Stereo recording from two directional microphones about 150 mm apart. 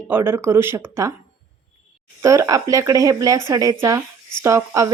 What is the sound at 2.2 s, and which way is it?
A woman's voice, 20° right (ahead or behind).